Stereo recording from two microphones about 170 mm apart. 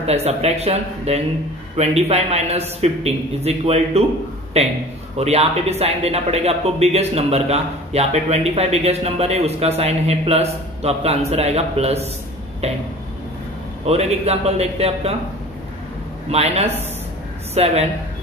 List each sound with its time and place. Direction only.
0.0 s speech: 40° right (ahead or behind)
13.8 s speech: 40° right (ahead or behind)
16.3 s speech: 35° right (ahead or behind)